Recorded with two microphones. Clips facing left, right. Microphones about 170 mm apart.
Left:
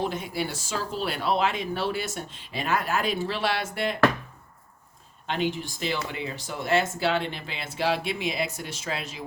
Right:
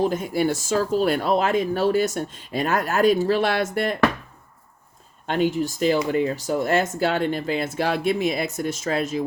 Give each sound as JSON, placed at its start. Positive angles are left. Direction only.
{"t": 0.0, "sound": "speech", "side_deg": -45}
{"t": 5.2, "sound": "speech", "side_deg": -45}